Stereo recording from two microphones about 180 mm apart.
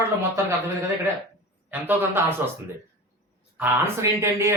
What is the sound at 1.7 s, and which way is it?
Speech, 10° right (ahead or behind).